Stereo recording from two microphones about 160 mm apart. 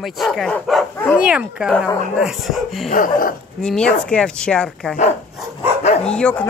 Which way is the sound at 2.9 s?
55° left (ahead or behind).